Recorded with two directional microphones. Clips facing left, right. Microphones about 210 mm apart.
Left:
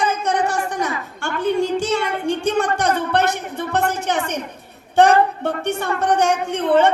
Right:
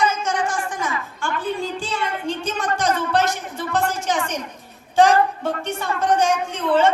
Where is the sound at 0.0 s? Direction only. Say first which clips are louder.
Even; 55° left (ahead or behind).